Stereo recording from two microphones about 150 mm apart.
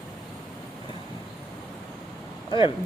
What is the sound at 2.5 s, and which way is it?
Speech, 35° left (ahead or behind).